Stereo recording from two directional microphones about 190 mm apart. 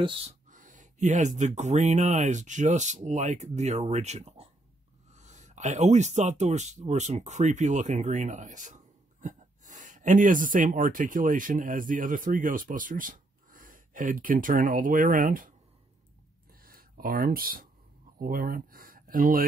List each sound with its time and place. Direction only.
0.5 s speech: 45° right (ahead or behind)
16.6 s speech: 50° right (ahead or behind)